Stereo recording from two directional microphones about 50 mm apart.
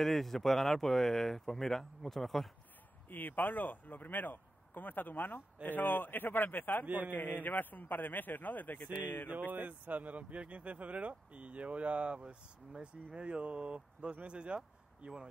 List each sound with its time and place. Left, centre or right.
0.0 s speech: centre
3.1 s speech: left
9.5 s a man's voice: right; by 15.2 s centre